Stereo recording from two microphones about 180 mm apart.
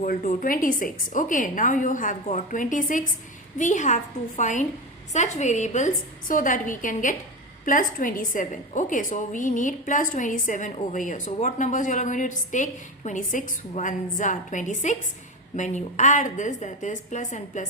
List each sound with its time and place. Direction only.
0.0 s a woman's voice: 50° left (ahead or behind)